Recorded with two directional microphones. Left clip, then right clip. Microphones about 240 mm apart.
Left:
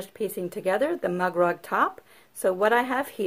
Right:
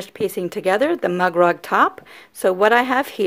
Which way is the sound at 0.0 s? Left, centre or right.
Right.